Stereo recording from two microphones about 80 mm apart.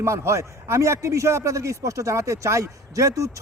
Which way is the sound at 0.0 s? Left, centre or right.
Right.